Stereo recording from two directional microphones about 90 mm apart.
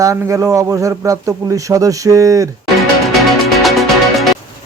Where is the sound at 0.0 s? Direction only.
35° right (ahead or behind).